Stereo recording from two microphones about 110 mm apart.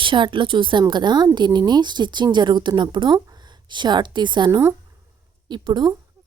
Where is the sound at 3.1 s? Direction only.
35° right (ahead or behind).